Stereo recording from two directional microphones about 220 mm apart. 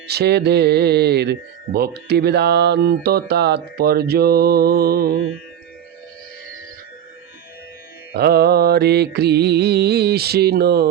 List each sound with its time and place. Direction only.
0.1 s speech: 50° right (ahead or behind)
8.1 s speech: 45° right (ahead or behind)